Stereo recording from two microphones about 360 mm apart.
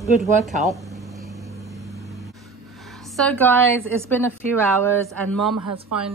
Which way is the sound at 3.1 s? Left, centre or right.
Centre.